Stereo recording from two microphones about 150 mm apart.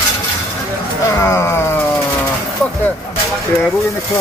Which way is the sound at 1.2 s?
15° left (ahead or behind).